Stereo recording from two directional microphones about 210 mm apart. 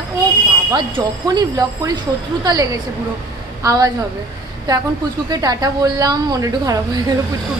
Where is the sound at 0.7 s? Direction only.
20° right (ahead or behind).